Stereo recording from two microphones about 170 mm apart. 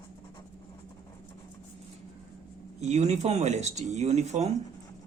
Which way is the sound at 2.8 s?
40° right (ahead or behind).